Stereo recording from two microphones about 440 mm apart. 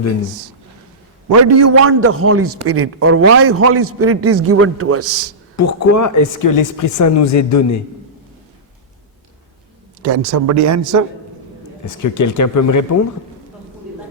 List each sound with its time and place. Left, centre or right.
1.3 s a man's voice: right
5.5 s speech: left
10.0 s a man's voice: right
11.9 s speech: left